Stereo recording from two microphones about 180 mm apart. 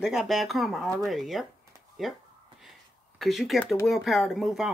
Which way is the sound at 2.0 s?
Centre (ahead or behind).